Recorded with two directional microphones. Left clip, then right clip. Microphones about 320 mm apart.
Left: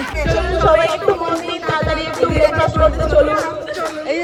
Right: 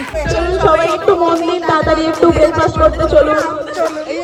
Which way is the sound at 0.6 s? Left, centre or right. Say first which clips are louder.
Right 2 dB; centre.